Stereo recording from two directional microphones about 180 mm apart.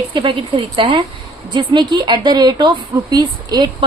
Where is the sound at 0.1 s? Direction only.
25° right (ahead or behind).